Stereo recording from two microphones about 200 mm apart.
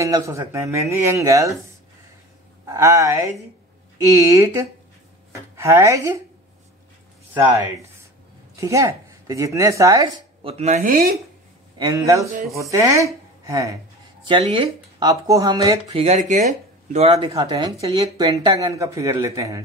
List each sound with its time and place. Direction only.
0.0 s speech: 15° right (ahead or behind)
2.6 s speech: 15° right (ahead or behind)
8.5 s speech: 15° right (ahead or behind)
10.6 s speech: 40° right (ahead or behind)
11.9 s speech: 15° right (ahead or behind)
15.9 s speech: 30° right (ahead or behind); by 19.6 s 15° right (ahead or behind)